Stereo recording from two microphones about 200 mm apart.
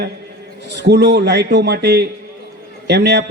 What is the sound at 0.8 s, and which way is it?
A man's voice, 55° right (ahead or behind).